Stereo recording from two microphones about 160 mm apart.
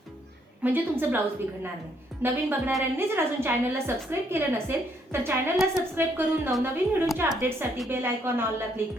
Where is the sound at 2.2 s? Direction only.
15° right (ahead or behind).